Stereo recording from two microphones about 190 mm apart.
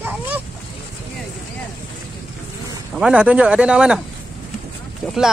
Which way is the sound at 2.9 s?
5° right (ahead or behind).